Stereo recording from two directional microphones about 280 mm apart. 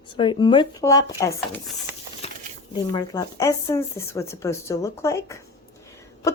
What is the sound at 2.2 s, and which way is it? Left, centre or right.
Crumpling, left.